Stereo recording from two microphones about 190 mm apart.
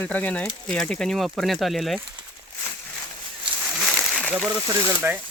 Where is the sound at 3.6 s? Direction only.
Centre (ahead or behind).